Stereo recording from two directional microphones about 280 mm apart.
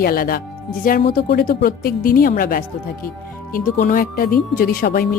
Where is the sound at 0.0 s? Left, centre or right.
Left.